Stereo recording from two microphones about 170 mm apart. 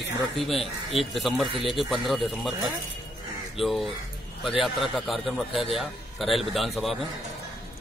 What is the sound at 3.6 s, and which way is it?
Speech, centre (ahead or behind).